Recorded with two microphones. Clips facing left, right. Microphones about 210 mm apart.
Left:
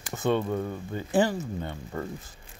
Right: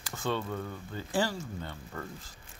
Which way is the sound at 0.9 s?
20° left (ahead or behind).